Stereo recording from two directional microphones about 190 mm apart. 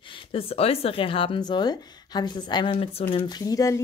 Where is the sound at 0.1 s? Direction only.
30° left (ahead or behind).